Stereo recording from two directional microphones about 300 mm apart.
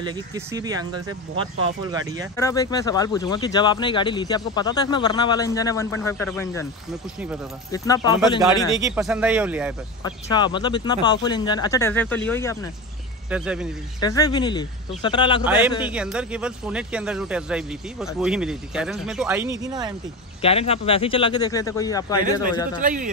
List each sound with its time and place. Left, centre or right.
0.0 s speech: centre
2.3 s speech: centre
7.7 s speech: centre
8.7 s speech: centre
10.0 s speech: centre
13.3 s speech: centre
14.0 s speech: centre
15.4 s speech: centre
20.4 s speech: centre
22.8 s speech: right